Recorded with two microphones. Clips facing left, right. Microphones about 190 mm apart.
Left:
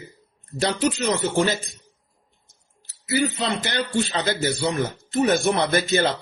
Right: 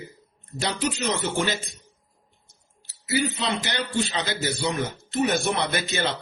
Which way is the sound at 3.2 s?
55° left (ahead or behind).